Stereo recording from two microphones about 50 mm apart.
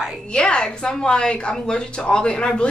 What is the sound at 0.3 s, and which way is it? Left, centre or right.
Speech, centre.